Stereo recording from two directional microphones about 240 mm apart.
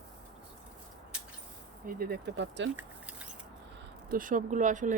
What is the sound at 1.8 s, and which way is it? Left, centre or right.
Speech, right.